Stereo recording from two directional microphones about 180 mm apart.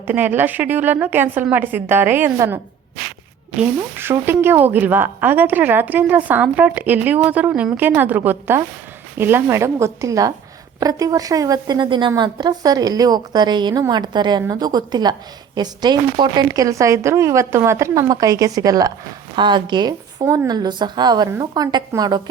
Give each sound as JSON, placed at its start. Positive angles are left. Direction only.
{"t": 0.1, "sound": "speech", "side_deg": -10}
{"t": 3.6, "sound": "a woman's voice", "side_deg": -10}